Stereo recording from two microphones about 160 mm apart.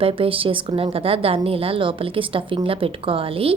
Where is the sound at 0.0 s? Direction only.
35° right (ahead or behind).